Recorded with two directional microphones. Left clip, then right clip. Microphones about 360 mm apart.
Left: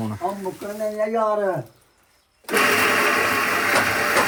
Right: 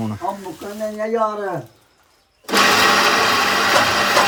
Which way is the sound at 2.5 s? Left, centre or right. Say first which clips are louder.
Right 4 dB; right.